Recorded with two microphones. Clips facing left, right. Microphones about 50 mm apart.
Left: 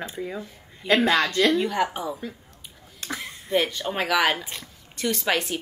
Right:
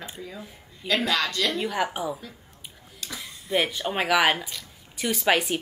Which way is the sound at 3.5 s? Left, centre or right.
Centre.